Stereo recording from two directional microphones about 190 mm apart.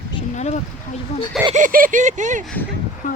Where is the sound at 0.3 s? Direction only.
40° left (ahead or behind).